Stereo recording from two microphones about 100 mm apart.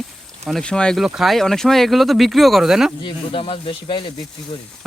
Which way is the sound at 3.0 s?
55° left (ahead or behind).